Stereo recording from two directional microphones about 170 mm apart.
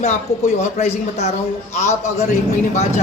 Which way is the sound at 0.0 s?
40° left (ahead or behind).